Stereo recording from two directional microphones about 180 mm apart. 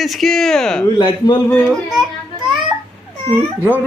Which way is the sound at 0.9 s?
25° left (ahead or behind).